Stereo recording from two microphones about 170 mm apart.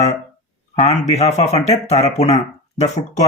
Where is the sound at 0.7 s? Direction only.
40° left (ahead or behind).